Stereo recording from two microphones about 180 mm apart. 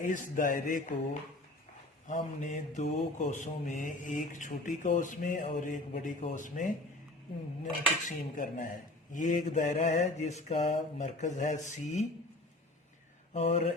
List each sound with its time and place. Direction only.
0.0 s speech: 45° left (ahead or behind)
2.0 s speech: 40° left (ahead or behind)
13.3 s speech: 35° left (ahead or behind)